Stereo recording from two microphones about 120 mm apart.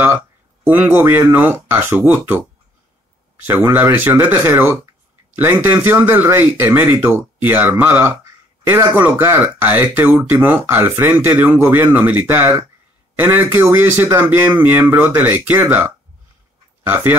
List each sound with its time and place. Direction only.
0.7 s speech: 15° right (ahead or behind)
3.4 s speech: 15° right (ahead or behind)